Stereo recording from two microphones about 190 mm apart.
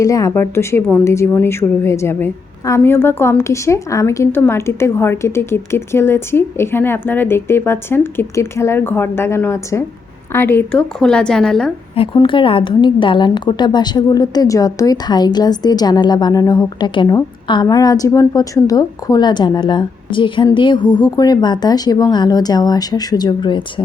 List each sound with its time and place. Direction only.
0.0 s a woman's voice: 15° left (ahead or behind)
11.9 s a woman's voice: 25° left (ahead or behind)